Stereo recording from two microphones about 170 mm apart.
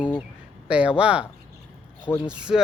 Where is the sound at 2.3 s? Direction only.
5° right (ahead or behind).